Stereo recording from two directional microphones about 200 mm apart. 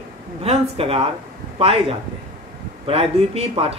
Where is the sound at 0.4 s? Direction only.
30° right (ahead or behind).